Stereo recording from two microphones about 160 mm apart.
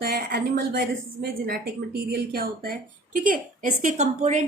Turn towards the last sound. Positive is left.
turn(degrees=-45)  # may be behind; listen again after turning